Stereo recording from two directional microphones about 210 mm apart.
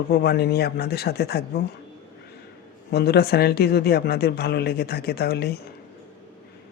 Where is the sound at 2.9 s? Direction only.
50° left (ahead or behind).